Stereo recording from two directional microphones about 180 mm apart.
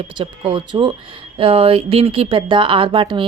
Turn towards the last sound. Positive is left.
turn(degrees=-30)  # may be behind; listen again after turning